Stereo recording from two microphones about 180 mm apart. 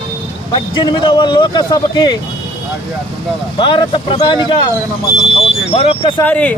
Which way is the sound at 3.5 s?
30° left (ahead or behind).